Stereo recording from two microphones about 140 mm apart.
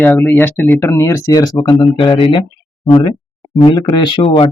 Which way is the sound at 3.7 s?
35° left (ahead or behind).